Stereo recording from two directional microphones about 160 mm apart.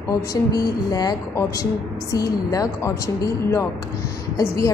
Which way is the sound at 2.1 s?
20° left (ahead or behind).